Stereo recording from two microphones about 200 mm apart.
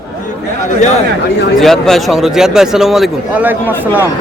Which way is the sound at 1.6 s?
Centre (ahead or behind).